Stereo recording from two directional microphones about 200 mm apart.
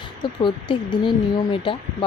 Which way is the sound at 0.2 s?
25° left (ahead or behind).